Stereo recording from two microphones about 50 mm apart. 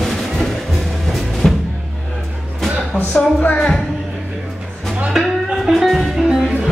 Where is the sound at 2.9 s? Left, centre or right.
Right.